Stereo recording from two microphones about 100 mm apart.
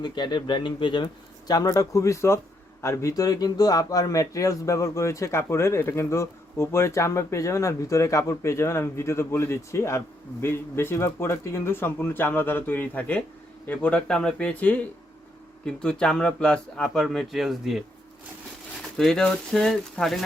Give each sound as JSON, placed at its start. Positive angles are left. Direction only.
{"t": 0.0, "sound": "speech", "side_deg": 45}
{"t": 18.9, "sound": "speech", "side_deg": 5}